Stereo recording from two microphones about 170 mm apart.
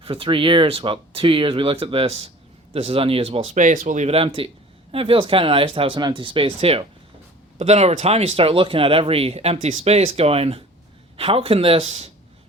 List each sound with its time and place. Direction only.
0.0 s speech: 30° right (ahead or behind)